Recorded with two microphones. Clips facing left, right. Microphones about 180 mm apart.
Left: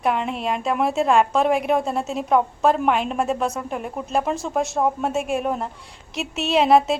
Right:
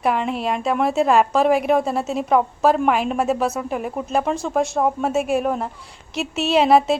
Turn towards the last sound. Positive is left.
turn(degrees=0)  # may be behind; listen again after turning